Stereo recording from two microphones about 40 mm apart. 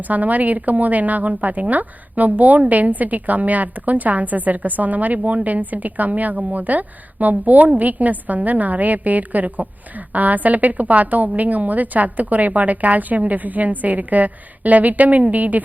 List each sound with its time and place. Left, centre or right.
0.0 s a woman's voice: right